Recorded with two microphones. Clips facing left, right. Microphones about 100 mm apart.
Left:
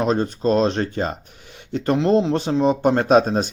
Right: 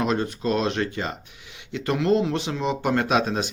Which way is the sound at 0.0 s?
35° left (ahead or behind).